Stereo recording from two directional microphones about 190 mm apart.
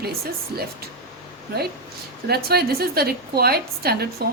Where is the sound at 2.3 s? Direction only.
55° right (ahead or behind).